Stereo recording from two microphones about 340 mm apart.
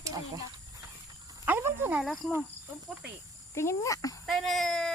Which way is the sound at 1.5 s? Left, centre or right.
Centre.